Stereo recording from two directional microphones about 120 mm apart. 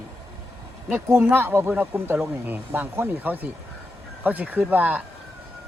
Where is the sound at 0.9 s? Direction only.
15° right (ahead or behind).